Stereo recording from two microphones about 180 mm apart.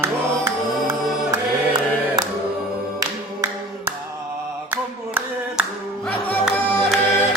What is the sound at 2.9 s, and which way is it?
Music, 20° right (ahead or behind).